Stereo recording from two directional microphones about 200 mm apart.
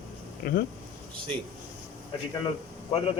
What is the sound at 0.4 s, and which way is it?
Speech, 50° left (ahead or behind).